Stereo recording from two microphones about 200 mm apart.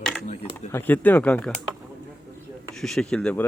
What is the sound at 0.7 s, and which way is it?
Speech, 10° left (ahead or behind).